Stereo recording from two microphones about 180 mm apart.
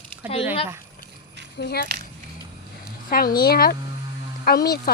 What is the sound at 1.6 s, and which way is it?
Speech, 60° left (ahead or behind).